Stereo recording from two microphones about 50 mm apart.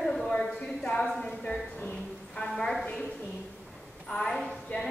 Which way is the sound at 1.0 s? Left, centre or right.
Centre.